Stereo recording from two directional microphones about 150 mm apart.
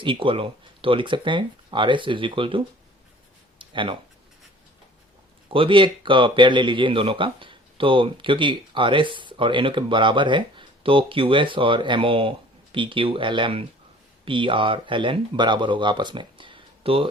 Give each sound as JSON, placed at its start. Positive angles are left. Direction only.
{"t": 0.0, "sound": "speech", "side_deg": -35}
{"t": 3.6, "sound": "a sound", "side_deg": -35}
{"t": 5.5, "sound": "speech", "side_deg": -35}